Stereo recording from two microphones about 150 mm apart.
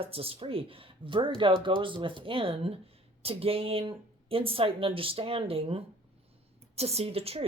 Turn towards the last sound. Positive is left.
turn(degrees=-40)  # may be behind; listen again after turning